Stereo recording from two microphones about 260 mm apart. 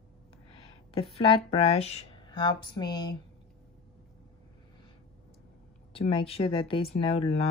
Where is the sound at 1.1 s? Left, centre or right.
Left.